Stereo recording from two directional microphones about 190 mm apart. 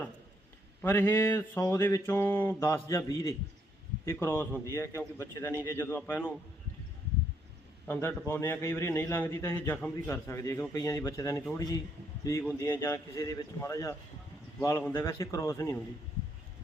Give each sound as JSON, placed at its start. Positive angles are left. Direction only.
{"t": 0.8, "sound": "a man's voice", "side_deg": 10}
{"t": 8.3, "sound": "a man's voice", "side_deg": 15}